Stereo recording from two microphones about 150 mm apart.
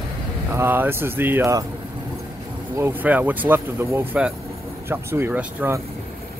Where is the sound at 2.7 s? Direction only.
15° right (ahead or behind).